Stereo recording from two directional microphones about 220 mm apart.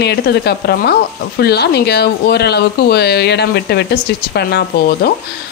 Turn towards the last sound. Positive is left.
turn(degrees=45)  # may be behind; listen again after turning